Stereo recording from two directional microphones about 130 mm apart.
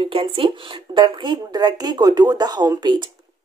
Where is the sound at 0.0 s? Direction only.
45° right (ahead or behind).